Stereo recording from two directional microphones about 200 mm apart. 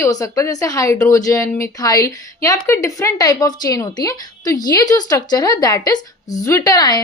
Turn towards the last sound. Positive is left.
turn(degrees=20)  # may be behind; listen again after turning